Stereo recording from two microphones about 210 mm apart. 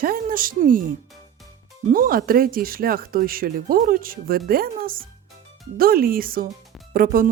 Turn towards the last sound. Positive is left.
turn(degrees=-45)  # may be behind; listen again after turning